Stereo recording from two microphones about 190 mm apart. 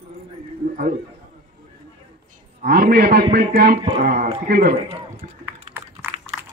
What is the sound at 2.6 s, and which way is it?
A man's voice, 55° right (ahead or behind).